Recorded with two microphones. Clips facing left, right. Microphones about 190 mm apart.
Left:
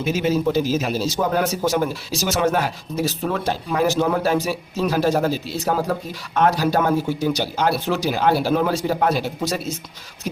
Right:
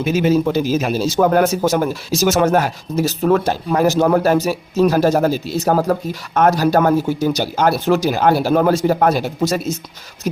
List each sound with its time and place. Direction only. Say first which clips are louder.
0.0 s a man's voice: right 4 dB; 55° right (ahead or behind)